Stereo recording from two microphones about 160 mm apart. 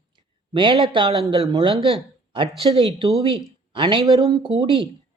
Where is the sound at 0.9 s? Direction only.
30° right (ahead or behind).